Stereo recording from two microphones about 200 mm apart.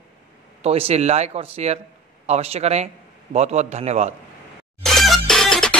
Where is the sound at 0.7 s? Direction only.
30° right (ahead or behind).